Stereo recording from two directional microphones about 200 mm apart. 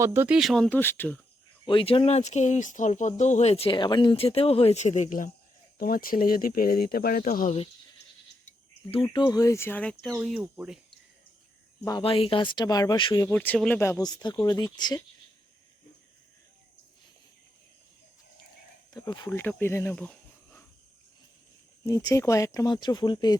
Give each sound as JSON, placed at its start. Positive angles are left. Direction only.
{"t": 0.0, "sound": "speech", "side_deg": -10}
{"t": 1.6, "sound": "speech", "side_deg": 25}
{"t": 9.0, "sound": "speech", "side_deg": 20}
{"t": 11.9, "sound": "speech", "side_deg": 25}
{"t": 13.3, "sound": "speech", "side_deg": 10}
{"t": 18.9, "sound": "speech", "side_deg": 20}
{"t": 19.3, "sound": "speech", "side_deg": 10}
{"t": 22.1, "sound": "speech", "side_deg": 15}